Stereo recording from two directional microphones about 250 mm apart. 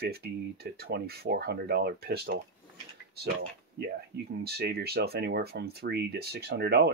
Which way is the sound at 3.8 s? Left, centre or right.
Right.